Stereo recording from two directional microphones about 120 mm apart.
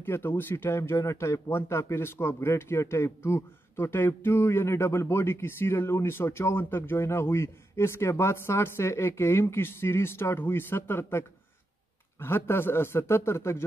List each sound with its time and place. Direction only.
0.0 s speech: 20° left (ahead or behind)